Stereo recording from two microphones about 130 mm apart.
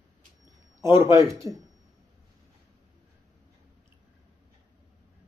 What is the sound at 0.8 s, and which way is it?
Speech, 20° right (ahead or behind).